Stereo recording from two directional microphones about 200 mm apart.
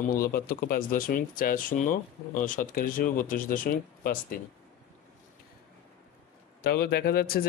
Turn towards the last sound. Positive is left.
turn(degrees=50)  # may be behind; listen again after turning